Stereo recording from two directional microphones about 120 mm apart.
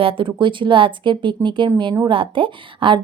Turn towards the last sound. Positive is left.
turn(degrees=-45)  # may be behind; listen again after turning